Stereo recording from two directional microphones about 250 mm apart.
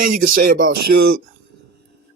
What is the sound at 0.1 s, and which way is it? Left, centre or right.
Speech, right.